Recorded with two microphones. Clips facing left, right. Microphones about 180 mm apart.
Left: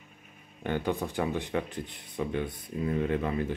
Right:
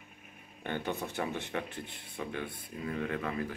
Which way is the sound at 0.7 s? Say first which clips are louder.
Left 5 dB; 15° left (ahead or behind).